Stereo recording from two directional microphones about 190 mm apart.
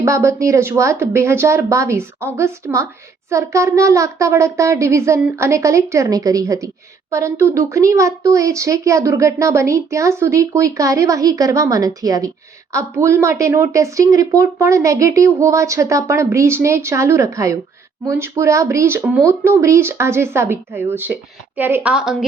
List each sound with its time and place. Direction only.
0.0 s a child's voice: 15° right (ahead or behind)